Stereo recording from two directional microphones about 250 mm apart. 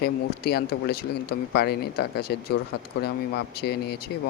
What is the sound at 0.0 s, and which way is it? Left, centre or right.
Speech, left.